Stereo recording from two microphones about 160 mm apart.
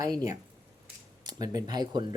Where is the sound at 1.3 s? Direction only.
25° right (ahead or behind).